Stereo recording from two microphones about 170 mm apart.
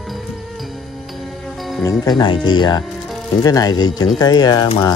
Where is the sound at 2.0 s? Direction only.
25° left (ahead or behind).